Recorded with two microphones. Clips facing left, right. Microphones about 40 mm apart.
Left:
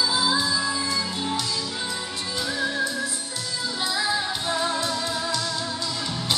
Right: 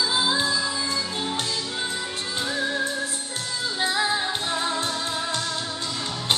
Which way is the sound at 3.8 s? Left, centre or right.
Right.